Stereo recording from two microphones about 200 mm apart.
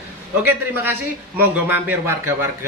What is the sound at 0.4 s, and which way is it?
Speech, 10° right (ahead or behind).